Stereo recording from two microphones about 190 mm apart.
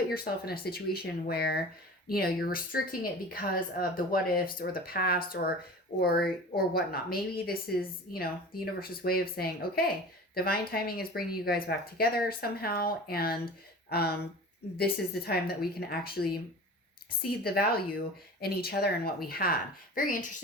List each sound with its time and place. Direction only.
0.1 s a woman's voice: 55° left (ahead or behind)
17.4 s a woman's voice: 55° left (ahead or behind)